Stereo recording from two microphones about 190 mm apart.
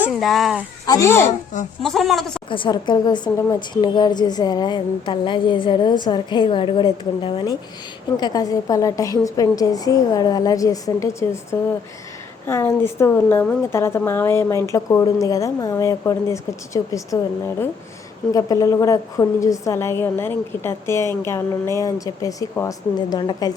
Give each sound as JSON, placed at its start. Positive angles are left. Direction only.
{"t": 0.0, "sound": "speech", "side_deg": 0}
{"t": 0.9, "sound": "speech", "side_deg": 15}
{"t": 1.8, "sound": "a woman's voice", "side_deg": 0}
{"t": 2.5, "sound": "a woman's voice", "side_deg": 25}
{"t": 12.5, "sound": "speech", "side_deg": 15}